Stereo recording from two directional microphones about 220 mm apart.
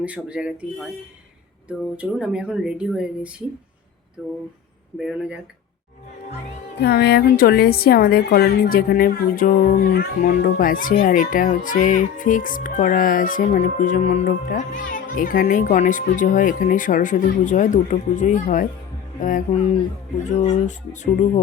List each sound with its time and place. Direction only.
0.0 s speech: 5° right (ahead or behind)
6.7 s a woman's voice: 50° left (ahead or behind)